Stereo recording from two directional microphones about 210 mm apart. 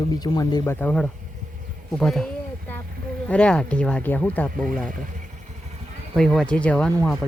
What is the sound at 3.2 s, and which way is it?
Speech, 5° left (ahead or behind).